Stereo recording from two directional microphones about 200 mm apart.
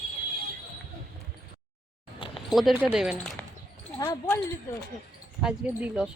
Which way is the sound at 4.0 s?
15° left (ahead or behind).